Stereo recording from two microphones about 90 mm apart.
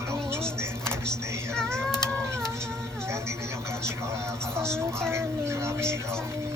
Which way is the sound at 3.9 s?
30° right (ahead or behind).